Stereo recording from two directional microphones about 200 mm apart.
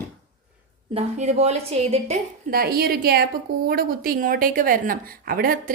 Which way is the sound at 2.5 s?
50° right (ahead or behind).